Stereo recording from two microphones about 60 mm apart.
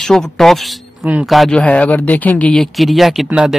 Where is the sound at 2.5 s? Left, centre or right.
Centre.